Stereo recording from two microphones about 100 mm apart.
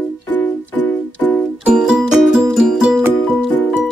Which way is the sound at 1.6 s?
10° right (ahead or behind).